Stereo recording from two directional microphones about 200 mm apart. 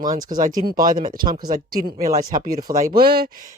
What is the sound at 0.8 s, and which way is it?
Speech, 45° right (ahead or behind).